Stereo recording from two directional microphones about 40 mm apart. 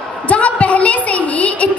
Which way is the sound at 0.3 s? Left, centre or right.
Left.